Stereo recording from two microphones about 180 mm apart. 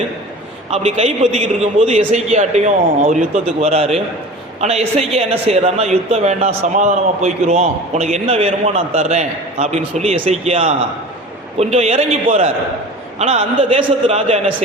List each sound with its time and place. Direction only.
0.7 s a man's voice: 35° right (ahead or behind)